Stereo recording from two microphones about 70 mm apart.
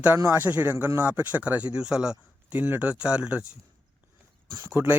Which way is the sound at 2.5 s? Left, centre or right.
Right.